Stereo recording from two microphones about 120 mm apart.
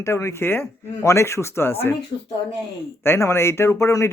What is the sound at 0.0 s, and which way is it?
A man's voice, 25° left (ahead or behind).